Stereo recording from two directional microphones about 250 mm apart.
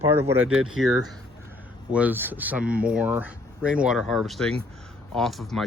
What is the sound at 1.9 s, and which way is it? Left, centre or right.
Speech, centre.